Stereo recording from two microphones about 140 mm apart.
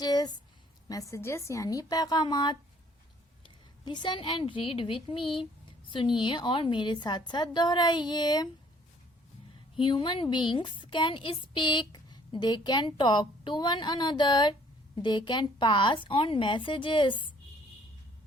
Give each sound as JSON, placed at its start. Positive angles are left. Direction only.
{"t": 0.0, "sound": "a sound", "side_deg": 30}
{"t": 0.9, "sound": "a woman's voice", "side_deg": 25}
{"t": 9.7, "sound": "a woman's voice", "side_deg": 35}